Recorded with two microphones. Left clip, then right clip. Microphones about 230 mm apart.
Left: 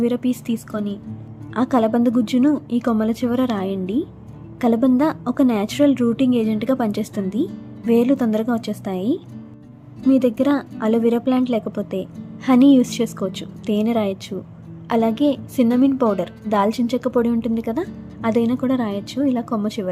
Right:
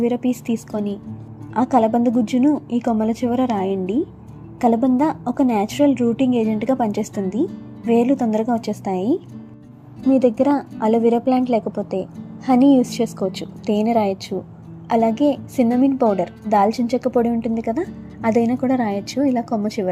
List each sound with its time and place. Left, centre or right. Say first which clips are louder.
0.0 s a woman's voice: right 1 dB; centre
11.6 s a woman's voice: right 2 dB; centre
11.9 s a woman's voice: right 2 dB; centre